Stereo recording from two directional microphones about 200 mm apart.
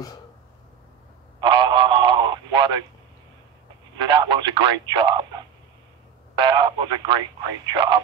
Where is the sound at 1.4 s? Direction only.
25° right (ahead or behind).